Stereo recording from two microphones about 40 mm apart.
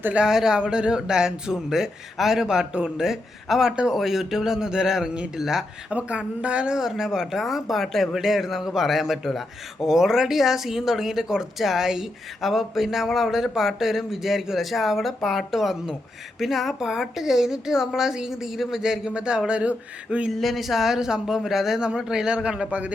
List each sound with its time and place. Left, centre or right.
0.3 s a man's voice: centre
5.9 s speech: right
6.7 s a man's voice: centre
19.1 s a man's voice: right
20.3 s a man's voice: centre; by 22.7 s right